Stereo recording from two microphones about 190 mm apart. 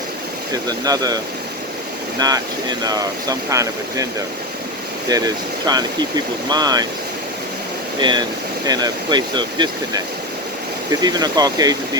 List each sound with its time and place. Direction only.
0.5 s speech: 20° right (ahead or behind)
5.0 s speech: 20° right (ahead or behind)
8.6 s speech: 20° right (ahead or behind)
11.0 s speech: 20° right (ahead or behind)